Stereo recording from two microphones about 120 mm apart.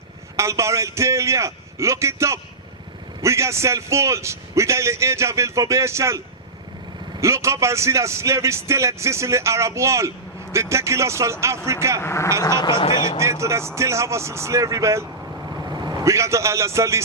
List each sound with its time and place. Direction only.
0.3 s a man's voice: 25° right (ahead or behind)
12.0 s speech: 25° left (ahead or behind)
12.4 s speech: 35° left (ahead or behind)
13.1 s a man's voice: 25° right (ahead or behind)
15.7 s vehicle: 35° right (ahead or behind)
16.0 s a man's voice: 25° right (ahead or behind)